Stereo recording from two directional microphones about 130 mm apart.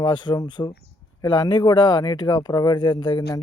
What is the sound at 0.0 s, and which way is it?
Speech, 35° left (ahead or behind).